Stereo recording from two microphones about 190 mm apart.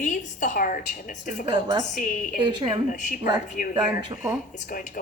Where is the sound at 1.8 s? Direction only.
40° left (ahead or behind).